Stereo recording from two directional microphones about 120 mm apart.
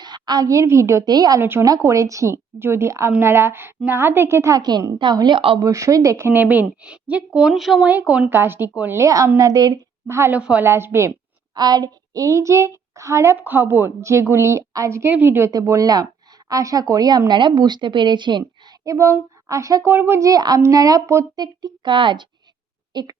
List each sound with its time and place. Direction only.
0.0 s a woman's voice: 35° right (ahead or behind)
1.4 s a woman's voice: 20° right (ahead or behind); by 7.9 s centre (ahead or behind)
7.9 s a woman's voice: 15° right (ahead or behind); by 9.7 s 35° right (ahead or behind)
10.1 s a woman's voice: 20° right (ahead or behind)
10.3 s a woman's voice: 10° right (ahead or behind)
10.7 s a woman's voice: 20° right (ahead or behind)
11.1 s a woman's voice: 35° right (ahead or behind)
18.9 s a woman's voice: 25° right (ahead or behind)
21.4 s a woman's voice: 40° right (ahead or behind)